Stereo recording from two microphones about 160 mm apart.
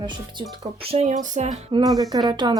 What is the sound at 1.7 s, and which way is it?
Speech, 30° right (ahead or behind).